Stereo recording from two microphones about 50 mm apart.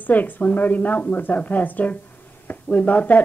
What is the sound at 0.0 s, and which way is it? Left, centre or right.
Speech, left.